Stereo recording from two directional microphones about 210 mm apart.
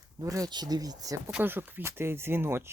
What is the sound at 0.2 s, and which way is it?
Speech, 15° right (ahead or behind).